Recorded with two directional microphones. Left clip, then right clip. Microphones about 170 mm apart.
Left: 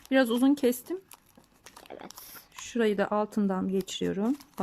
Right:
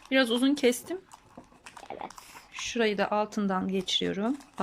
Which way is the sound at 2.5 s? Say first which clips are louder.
Even; 40° left (ahead or behind).